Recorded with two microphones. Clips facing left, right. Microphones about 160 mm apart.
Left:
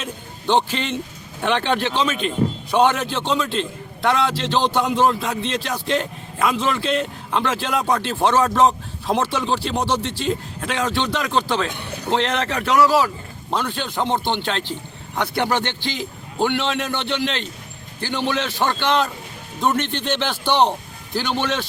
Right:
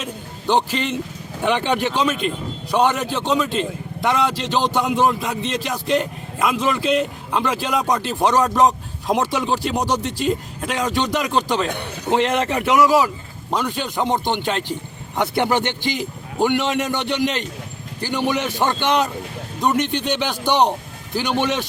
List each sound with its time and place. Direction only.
0.0 s a man's voice: 10° right (ahead or behind)
11.2 s a man's voice: 5° right (ahead or behind)
12.0 s a man's voice: 15° right (ahead or behind)
16.4 s a man's voice: 5° right (ahead or behind)